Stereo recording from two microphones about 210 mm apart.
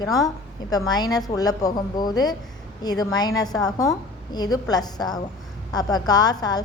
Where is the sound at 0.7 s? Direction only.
20° left (ahead or behind).